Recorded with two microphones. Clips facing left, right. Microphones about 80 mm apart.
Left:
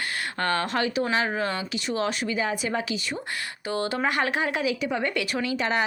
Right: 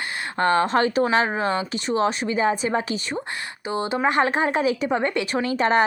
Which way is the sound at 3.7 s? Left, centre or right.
Right.